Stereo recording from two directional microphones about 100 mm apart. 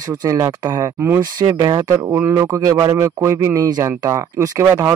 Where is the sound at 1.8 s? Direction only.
30° right (ahead or behind).